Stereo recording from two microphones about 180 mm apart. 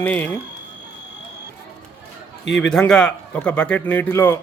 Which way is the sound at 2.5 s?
5° left (ahead or behind).